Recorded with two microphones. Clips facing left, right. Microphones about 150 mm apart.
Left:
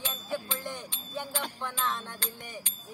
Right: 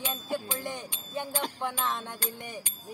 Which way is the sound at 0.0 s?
15° right (ahead or behind).